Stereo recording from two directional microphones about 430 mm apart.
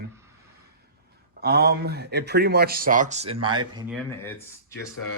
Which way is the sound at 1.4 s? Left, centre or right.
Right.